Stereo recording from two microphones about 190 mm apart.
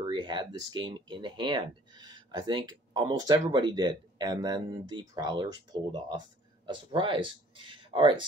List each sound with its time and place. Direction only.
0.0 s speech: 25° right (ahead or behind)